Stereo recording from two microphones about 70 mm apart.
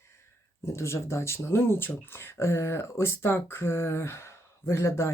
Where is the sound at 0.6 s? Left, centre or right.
Left.